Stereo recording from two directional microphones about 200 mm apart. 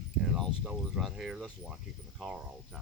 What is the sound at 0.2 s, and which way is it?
Speech, centre (ahead or behind).